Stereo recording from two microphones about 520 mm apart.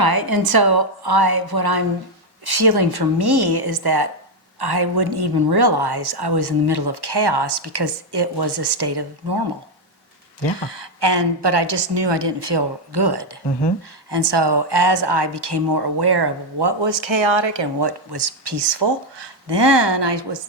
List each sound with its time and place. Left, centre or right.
0.0 s a woman's voice: right
10.7 s a woman's voice: right